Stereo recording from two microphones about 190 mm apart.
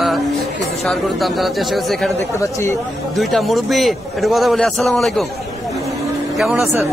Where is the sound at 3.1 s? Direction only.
Centre (ahead or behind).